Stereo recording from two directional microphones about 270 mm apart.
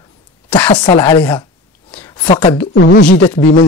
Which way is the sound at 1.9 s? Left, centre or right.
Centre.